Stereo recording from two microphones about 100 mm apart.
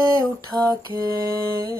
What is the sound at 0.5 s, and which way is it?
Mantra, 40° right (ahead or behind).